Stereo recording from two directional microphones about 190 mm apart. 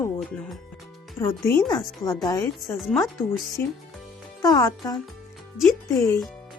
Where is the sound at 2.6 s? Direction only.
Centre (ahead or behind).